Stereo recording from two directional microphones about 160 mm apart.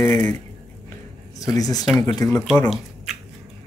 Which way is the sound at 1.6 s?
25° left (ahead or behind).